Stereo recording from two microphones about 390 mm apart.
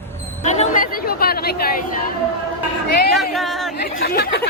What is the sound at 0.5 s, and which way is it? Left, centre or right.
Chatter, centre.